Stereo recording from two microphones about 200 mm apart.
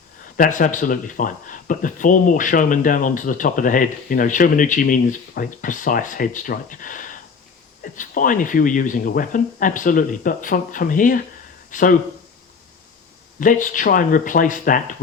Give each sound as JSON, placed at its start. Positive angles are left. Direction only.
{"t": 0.3, "sound": "speech", "side_deg": 40}
{"t": 13.4, "sound": "speech", "side_deg": 40}